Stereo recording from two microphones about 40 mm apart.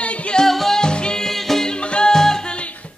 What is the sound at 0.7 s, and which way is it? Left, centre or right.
Music, left.